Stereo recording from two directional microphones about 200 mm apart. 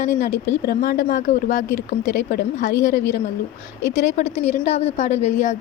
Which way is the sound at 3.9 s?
35° left (ahead or behind).